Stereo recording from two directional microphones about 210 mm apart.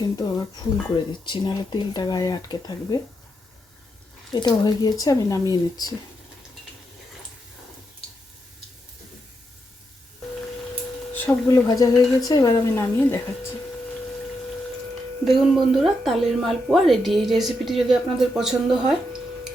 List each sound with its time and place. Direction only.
0.0 s speech: 20° left (ahead or behind)
4.4 s speech: 20° left (ahead or behind)
11.1 s speech: 15° left (ahead or behind)
15.2 s speech: centre (ahead or behind)